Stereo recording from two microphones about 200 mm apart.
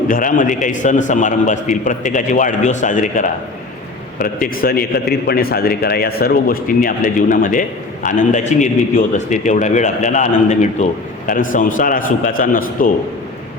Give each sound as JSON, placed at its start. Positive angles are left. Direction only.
{"t": 0.1, "sound": "a man's voice", "side_deg": 45}